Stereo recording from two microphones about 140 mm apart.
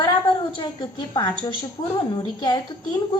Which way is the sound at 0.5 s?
35° left (ahead or behind).